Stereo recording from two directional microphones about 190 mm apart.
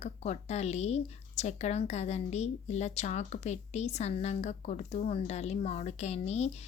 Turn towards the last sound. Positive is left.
turn(degrees=35)  # may be behind; listen again after turning